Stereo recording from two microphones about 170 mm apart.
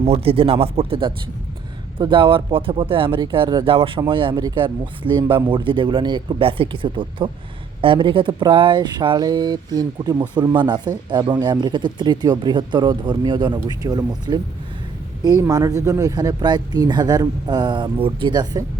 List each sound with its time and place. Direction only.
0.0 s speech: 35° right (ahead or behind)